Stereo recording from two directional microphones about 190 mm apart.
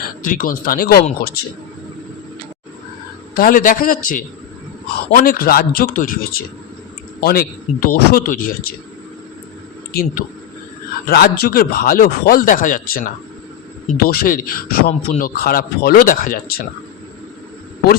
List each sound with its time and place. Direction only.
0.3 s speech: 45° left (ahead or behind)
3.3 s speech: 50° left (ahead or behind)
9.9 s speech: 50° left (ahead or behind)
14.8 s speech: 35° left (ahead or behind)
15.4 s speech: 50° left (ahead or behind)